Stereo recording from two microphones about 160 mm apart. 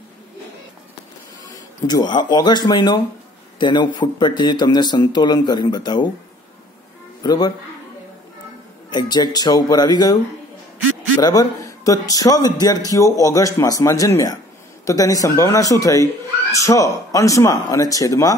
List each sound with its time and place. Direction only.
1.5 s a man's voice: 25° left (ahead or behind)
7.2 s a man's voice: 25° left (ahead or behind)
8.9 s a man's voice: 25° left (ahead or behind)
11.1 s a man's voice: 25° left (ahead or behind)